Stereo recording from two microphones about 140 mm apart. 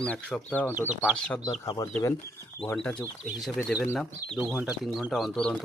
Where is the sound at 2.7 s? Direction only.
10° left (ahead or behind).